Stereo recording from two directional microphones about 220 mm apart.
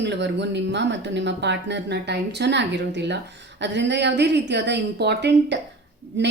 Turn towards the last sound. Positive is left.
turn(degrees=-55)  # may be behind; listen again after turning